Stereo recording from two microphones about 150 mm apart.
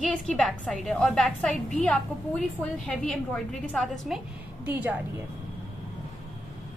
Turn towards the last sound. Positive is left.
turn(degrees=-10)  # may be behind; listen again after turning